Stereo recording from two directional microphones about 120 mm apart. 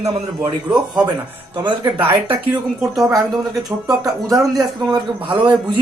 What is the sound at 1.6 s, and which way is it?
Speech, 40° right (ahead or behind).